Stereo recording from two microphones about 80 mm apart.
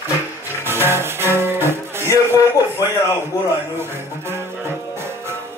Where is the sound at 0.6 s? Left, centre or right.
Right.